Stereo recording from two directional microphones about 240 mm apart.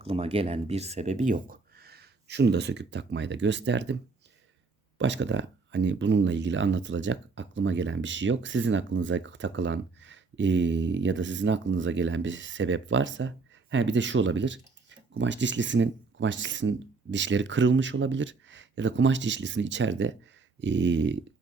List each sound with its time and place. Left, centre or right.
0.0 s speech: right
4.9 s speech: right